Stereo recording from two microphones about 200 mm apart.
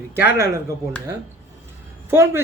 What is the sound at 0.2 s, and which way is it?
Speech, 10° right (ahead or behind).